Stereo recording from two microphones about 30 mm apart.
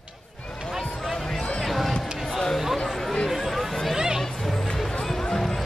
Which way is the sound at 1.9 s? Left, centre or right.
Centre.